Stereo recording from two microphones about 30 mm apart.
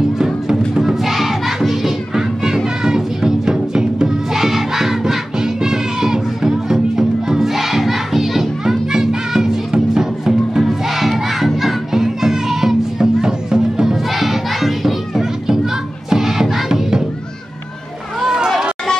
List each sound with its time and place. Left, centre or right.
0.2 s music: right
1.0 s music: centre
2.6 s music: right
4.3 s music: centre
8.6 s music: centre
10.7 s music: centre
14.1 s crowd: centre
15.1 s music: centre
18.4 s chatter: right